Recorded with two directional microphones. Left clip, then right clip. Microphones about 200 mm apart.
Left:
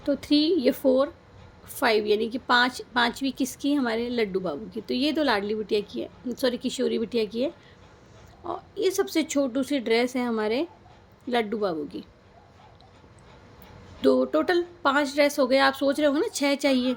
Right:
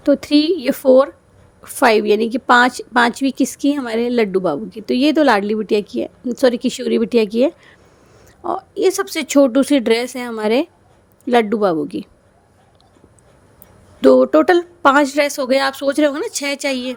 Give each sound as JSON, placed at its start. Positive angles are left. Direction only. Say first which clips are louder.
{"t": 0.0, "sound": "a woman's voice", "louder": "right 9 dB", "side_deg": -50}
{"t": 14.0, "sound": "a woman's voice", "louder": "right 11 dB", "side_deg": -50}